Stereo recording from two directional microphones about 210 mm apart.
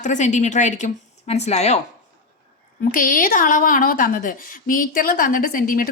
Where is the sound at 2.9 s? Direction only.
40° left (ahead or behind).